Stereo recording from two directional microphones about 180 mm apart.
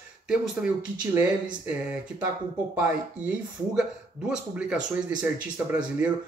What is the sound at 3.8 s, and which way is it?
Speech, 5° right (ahead or behind).